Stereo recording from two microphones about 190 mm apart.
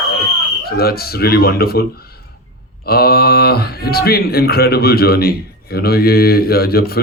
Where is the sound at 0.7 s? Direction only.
55° left (ahead or behind).